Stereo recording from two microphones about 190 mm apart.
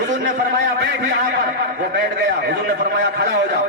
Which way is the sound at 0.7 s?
65° right (ahead or behind).